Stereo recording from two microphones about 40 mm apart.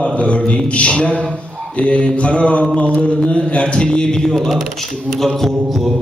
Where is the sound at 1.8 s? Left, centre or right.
Left.